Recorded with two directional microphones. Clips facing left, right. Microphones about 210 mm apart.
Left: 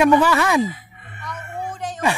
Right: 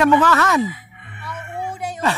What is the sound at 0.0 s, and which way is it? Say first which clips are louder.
Speech: even; 10° left (ahead or behind).